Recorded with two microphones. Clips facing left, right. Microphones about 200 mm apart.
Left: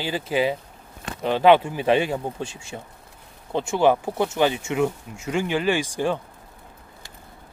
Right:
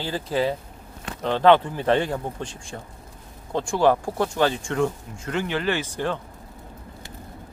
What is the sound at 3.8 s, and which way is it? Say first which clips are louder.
Speech: left 1 dB; 5° left (ahead or behind).